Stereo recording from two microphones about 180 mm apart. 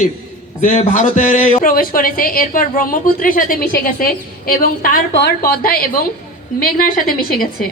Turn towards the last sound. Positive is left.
turn(degrees=55)  # may be behind; listen again after turning